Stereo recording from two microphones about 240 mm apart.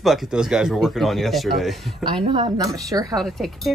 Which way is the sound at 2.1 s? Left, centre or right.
Centre.